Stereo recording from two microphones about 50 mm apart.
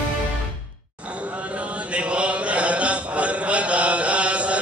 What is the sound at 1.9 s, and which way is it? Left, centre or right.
Chant, right.